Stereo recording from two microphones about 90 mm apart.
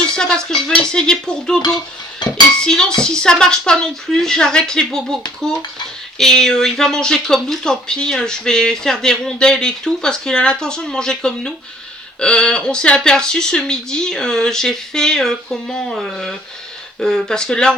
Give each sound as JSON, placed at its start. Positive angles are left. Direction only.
{"t": 0.2, "sound": "speech", "side_deg": 5}